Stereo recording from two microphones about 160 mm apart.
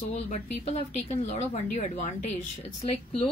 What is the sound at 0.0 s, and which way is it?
A woman's voice, 45° left (ahead or behind).